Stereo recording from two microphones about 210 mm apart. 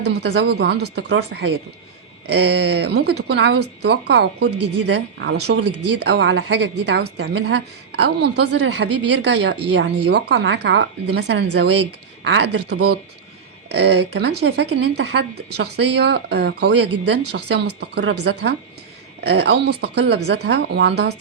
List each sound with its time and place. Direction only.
0.0 s speech: 55° right (ahead or behind)
4.5 s speech: 90° right
4.9 s a woman's voice: 55° right (ahead or behind); by 9.8 s 75° right (ahead or behind)
10.1 s a woman's voice: 55° right (ahead or behind)